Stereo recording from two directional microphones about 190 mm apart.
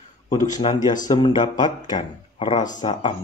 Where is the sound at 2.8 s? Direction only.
25° left (ahead or behind).